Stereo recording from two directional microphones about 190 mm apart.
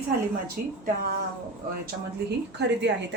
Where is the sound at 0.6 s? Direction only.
50° right (ahead or behind).